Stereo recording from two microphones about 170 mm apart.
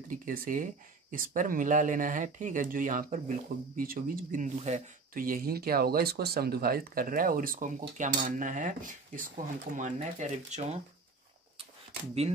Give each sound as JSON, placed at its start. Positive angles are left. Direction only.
{"t": 0.1, "sound": "cutlery", "side_deg": -50}
{"t": 1.1, "sound": "speech", "side_deg": -50}
{"t": 8.2, "sound": "cutlery", "side_deg": -50}